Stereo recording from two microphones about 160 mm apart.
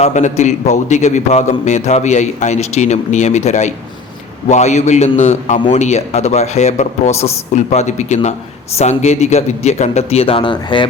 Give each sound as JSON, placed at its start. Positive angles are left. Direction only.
{"t": 0.0, "sound": "a man's voice", "side_deg": 45}